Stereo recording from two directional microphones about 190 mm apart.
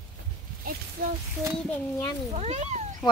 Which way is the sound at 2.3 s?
35° right (ahead or behind).